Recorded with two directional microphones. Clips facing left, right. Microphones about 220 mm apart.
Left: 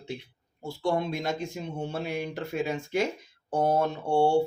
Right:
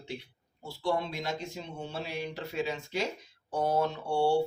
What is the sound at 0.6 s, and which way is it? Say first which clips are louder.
Speech: left 3 dB; 50° left (ahead or behind).